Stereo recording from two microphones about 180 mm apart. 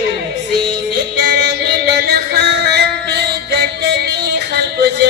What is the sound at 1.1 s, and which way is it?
Music, 70° right (ahead or behind).